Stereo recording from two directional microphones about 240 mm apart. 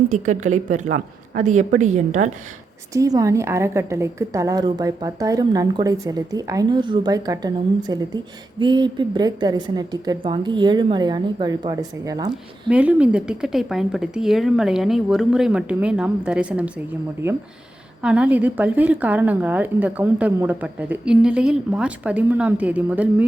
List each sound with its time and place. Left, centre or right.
0.1 s a woman's voice: right
2.9 s a woman's voice: centre
18.0 s a woman's voice: centre